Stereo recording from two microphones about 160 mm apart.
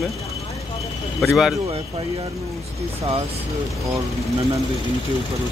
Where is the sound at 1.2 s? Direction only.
5° right (ahead or behind).